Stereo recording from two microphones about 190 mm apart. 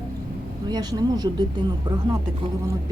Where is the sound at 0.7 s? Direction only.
20° right (ahead or behind).